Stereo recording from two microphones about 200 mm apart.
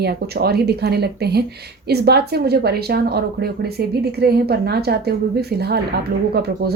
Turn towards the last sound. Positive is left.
turn(degrees=-50)  # may be behind; listen again after turning